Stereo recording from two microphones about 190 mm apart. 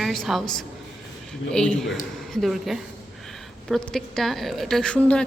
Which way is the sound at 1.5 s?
5° left (ahead or behind).